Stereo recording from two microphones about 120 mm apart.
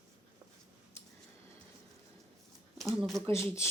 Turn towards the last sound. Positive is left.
turn(degrees=20)  # may be behind; listen again after turning